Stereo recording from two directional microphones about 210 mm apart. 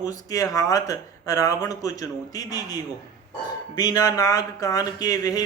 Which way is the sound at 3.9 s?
15° left (ahead or behind).